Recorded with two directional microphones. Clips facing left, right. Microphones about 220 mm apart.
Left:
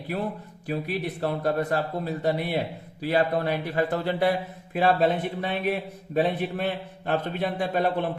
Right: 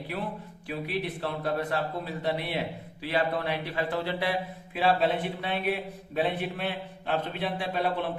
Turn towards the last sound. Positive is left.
turn(degrees=45)  # may be behind; listen again after turning